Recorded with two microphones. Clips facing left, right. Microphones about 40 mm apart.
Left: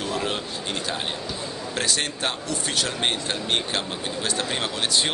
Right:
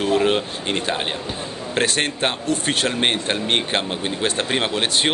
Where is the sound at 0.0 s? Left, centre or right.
Right.